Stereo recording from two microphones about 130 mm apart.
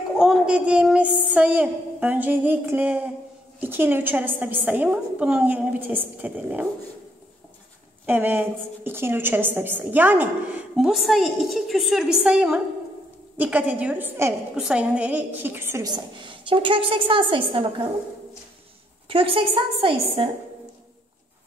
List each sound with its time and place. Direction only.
0.2 s a woman's voice: 5° right (ahead or behind)
8.1 s a woman's voice: 15° right (ahead or behind)
14.5 s a woman's voice: 5° right (ahead or behind)
15.8 s a woman's voice: 30° right (ahead or behind)
19.0 s a woman's voice: 45° right (ahead or behind)